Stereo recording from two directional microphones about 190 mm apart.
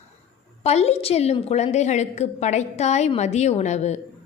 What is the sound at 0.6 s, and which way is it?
A woman's voice, 35° left (ahead or behind).